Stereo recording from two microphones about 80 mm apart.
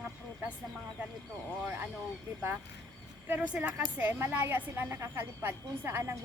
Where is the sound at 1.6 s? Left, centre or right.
Right.